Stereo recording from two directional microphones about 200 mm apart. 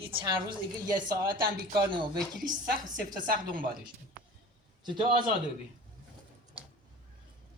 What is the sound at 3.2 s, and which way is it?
Speech, 45° right (ahead or behind).